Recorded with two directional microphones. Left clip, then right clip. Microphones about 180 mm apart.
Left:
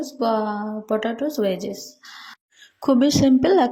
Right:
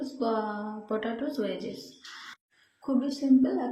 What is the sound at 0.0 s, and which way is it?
Speech, 45° left (ahead or behind).